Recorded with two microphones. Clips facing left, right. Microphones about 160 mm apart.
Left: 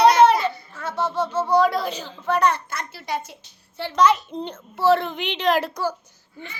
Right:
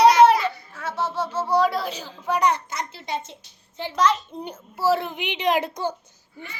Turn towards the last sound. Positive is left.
turn(degrees=-20)  # may be behind; listen again after turning